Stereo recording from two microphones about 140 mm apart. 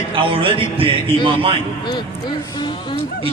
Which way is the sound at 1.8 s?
30° left (ahead or behind).